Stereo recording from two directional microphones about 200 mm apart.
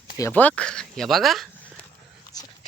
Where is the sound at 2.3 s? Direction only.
20° left (ahead or behind).